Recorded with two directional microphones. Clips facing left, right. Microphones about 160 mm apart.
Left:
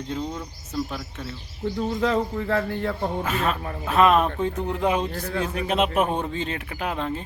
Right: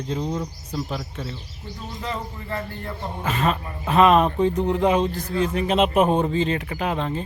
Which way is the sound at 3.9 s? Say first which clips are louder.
Right 2 dB; centre (ahead or behind).